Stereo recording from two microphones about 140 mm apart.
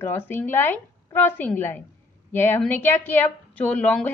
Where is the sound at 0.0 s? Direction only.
15° left (ahead or behind).